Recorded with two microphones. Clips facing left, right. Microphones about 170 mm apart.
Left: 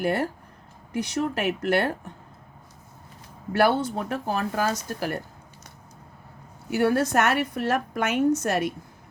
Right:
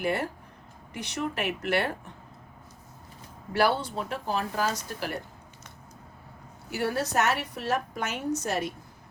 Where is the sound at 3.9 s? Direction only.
50° left (ahead or behind).